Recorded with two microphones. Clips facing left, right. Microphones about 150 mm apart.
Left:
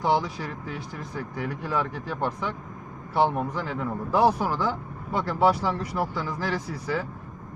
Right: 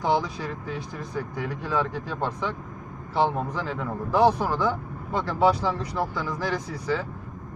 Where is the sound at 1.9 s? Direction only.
5° left (ahead or behind).